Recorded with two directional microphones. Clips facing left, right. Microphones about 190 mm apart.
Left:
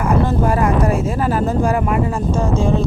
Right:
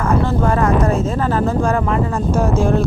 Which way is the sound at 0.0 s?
15° left (ahead or behind).